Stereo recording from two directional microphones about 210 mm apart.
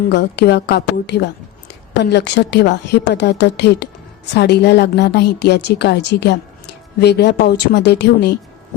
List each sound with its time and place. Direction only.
0.1 s a woman's voice: 50° left (ahead or behind)